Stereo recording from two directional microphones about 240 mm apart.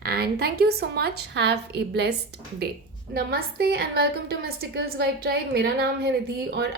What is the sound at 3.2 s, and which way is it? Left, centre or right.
A woman's voice, right.